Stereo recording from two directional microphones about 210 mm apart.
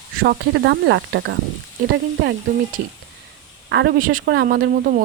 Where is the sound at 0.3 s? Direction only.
55° right (ahead or behind).